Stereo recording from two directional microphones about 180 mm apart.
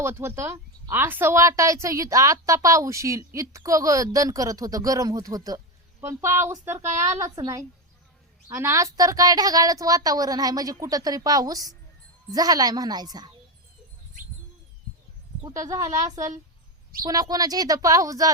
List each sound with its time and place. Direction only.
0.0 s a woman's voice: 15° right (ahead or behind)
15.4 s a woman's voice: 20° right (ahead or behind)